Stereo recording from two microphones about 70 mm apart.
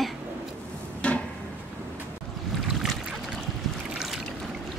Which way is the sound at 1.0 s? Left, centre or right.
Centre.